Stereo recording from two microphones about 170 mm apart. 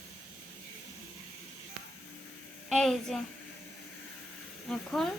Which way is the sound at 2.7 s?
Centre (ahead or behind).